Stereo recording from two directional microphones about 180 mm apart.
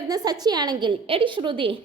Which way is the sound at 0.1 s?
20° right (ahead or behind).